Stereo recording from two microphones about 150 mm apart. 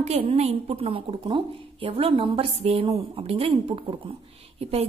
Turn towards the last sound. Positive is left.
turn(degrees=-40)  # may be behind; listen again after turning